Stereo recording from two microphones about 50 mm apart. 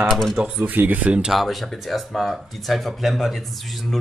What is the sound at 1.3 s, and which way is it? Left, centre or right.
Speech, centre.